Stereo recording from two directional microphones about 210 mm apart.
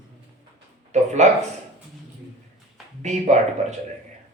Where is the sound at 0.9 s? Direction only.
30° right (ahead or behind).